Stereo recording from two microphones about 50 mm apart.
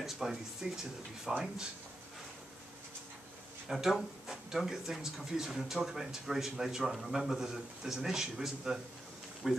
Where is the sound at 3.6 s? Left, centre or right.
Centre.